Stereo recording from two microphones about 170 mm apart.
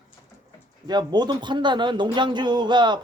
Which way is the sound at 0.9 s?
25° right (ahead or behind).